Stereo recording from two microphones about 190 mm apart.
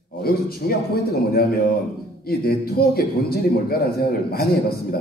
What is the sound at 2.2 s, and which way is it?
A man's voice, 55° left (ahead or behind).